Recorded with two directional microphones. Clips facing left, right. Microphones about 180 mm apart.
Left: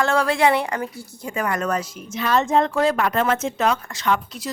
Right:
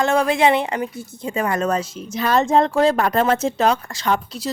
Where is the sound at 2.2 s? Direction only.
35° right (ahead or behind).